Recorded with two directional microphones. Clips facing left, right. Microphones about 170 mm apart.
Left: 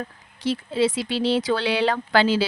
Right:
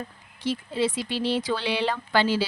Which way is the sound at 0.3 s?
85° left.